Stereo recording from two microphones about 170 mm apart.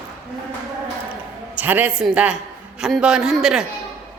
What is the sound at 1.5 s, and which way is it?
A man's voice, 10° right (ahead or behind).